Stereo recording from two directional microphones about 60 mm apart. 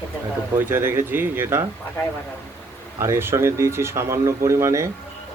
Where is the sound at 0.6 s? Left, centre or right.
Right.